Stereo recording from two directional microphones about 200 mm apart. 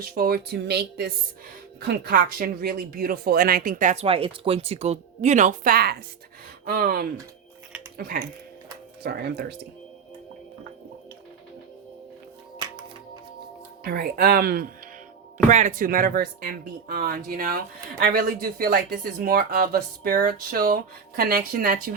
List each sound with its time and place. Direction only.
0.0 s speech: 50° right (ahead or behind)
13.8 s speech: 50° right (ahead or behind)
15.4 s speech: 35° right (ahead or behind)